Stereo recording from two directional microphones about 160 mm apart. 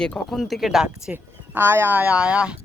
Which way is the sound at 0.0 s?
5° left (ahead or behind).